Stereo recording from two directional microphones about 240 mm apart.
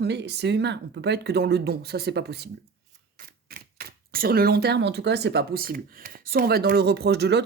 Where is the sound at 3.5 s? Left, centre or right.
Right.